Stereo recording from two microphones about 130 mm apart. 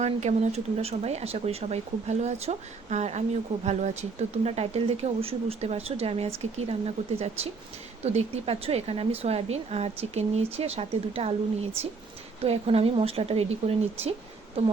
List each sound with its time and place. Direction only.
0.0 s a woman's voice: 60° right (ahead or behind)